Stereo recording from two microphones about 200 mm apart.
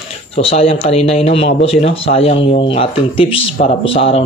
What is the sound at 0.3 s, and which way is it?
Speech, 30° left (ahead or behind).